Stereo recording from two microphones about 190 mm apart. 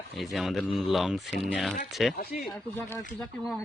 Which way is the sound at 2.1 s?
55° left (ahead or behind).